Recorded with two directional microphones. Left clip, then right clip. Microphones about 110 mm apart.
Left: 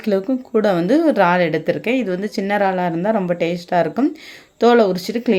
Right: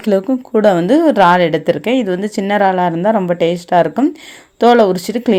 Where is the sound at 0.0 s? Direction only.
40° right (ahead or behind).